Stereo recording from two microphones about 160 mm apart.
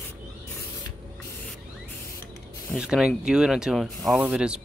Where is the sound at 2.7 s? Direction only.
5° right (ahead or behind).